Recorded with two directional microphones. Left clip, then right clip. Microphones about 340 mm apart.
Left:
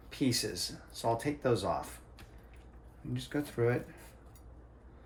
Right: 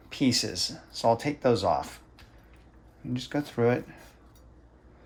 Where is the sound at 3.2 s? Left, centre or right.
Right.